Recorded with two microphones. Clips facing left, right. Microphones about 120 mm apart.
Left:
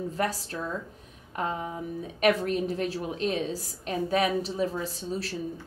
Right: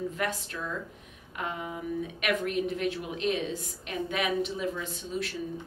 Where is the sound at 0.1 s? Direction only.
35° left (ahead or behind).